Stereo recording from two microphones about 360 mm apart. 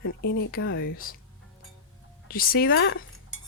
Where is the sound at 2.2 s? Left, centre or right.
Left.